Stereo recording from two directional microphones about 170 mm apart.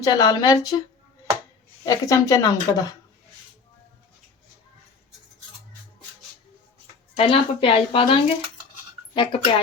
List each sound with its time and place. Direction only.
0.0 s speech: 25° left (ahead or behind)
1.8 s speech: 20° left (ahead or behind)
7.2 s speech: 35° left (ahead or behind)